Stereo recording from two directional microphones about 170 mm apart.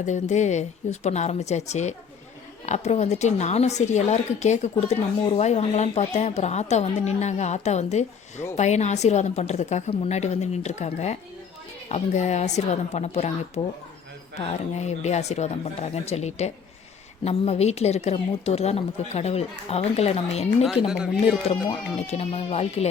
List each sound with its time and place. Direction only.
0.0 s speech: 45° left (ahead or behind)
14.8 s speech: 40° left (ahead or behind)
20.8 s speech: 5° right (ahead or behind)
22.0 s speech: 40° left (ahead or behind)